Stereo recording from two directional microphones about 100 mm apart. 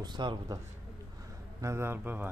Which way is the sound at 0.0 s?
50° right (ahead or behind).